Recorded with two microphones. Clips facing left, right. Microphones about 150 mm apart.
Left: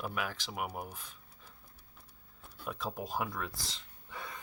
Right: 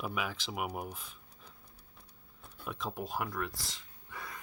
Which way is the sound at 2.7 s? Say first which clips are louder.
Even; centre (ahead or behind).